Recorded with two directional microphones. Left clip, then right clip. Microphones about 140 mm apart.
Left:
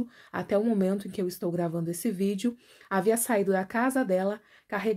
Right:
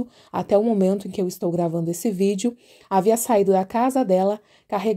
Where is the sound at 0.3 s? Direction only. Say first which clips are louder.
Right 8 dB; 35° right (ahead or behind).